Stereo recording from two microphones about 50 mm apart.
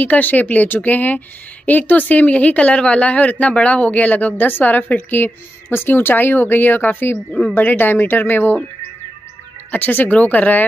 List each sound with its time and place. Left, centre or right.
0.0 s a woman's voice: left
9.7 s a woman's voice: left